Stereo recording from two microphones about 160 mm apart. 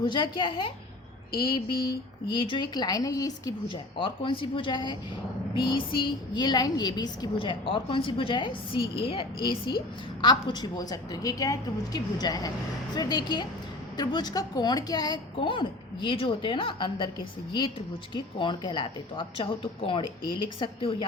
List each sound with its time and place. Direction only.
0.0 s speech: 30° left (ahead or behind)
2.3 s a woman's voice: 30° left (ahead or behind)